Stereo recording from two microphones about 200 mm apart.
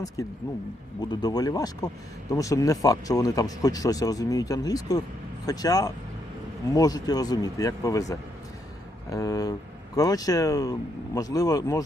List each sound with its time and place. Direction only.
0.2 s speech: 15° left (ahead or behind)